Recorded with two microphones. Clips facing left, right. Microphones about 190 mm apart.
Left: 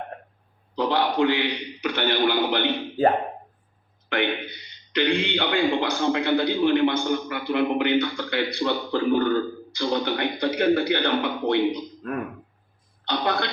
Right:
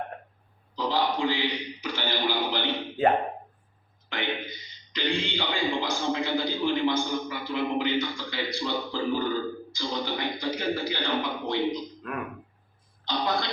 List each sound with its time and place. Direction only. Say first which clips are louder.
0.8 s a man's voice: left 5 dB; 60° left (ahead or behind)
4.1 s a man's voice: left 6 dB; 60° left (ahead or behind)
13.1 s a man's voice: left 3 dB; 65° left (ahead or behind)